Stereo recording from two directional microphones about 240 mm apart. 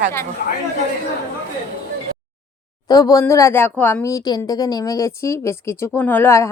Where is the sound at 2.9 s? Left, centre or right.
Centre.